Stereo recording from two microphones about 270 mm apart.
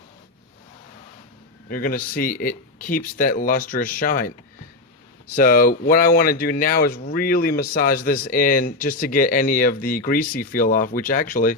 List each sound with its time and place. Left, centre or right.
1.7 s speech: left
5.3 s speech: left